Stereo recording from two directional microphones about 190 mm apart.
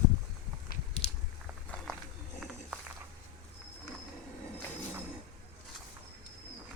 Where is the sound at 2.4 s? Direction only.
Centre (ahead or behind).